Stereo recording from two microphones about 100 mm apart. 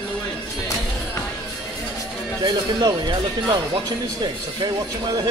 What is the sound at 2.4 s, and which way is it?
Speech, 45° right (ahead or behind).